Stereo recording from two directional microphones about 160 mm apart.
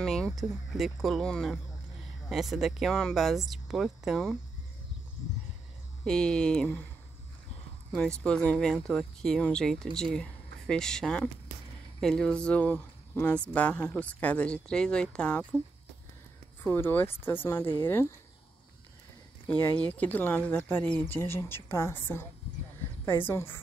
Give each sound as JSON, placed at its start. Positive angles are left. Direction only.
{"t": 0.0, "sound": "speech", "side_deg": 0}
{"t": 6.0, "sound": "speech", "side_deg": 5}
{"t": 7.9, "sound": "speech", "side_deg": 5}
{"t": 16.6, "sound": "speech", "side_deg": 10}
{"t": 19.4, "sound": "speech", "side_deg": 10}